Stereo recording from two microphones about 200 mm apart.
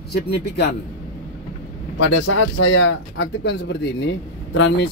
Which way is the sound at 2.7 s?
65° left (ahead or behind).